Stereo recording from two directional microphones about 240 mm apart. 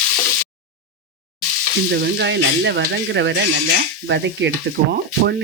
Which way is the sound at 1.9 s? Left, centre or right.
Right.